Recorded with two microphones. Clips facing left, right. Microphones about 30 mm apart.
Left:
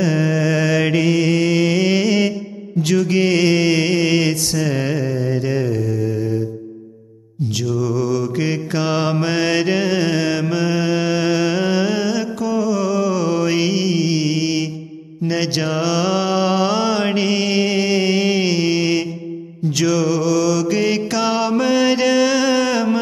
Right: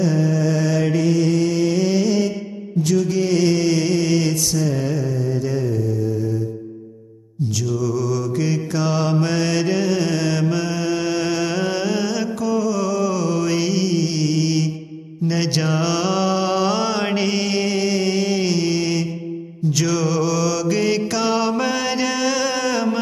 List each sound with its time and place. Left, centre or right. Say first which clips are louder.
0.0 s mantra: left 1 dB; left
5.7 s mantra: left 1 dB; left
7.5 s mantra: left 2 dB; left
19.7 s mantra: left 3 dB; centre